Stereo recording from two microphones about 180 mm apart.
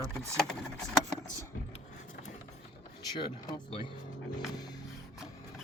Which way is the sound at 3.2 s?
25° left (ahead or behind).